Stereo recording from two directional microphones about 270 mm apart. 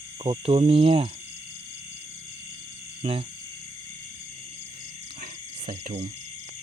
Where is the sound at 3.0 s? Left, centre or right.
Right.